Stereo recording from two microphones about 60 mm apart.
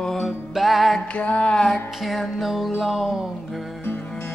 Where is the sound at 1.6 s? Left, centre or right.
Centre.